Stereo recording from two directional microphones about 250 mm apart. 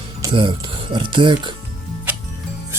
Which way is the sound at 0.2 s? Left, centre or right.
Centre.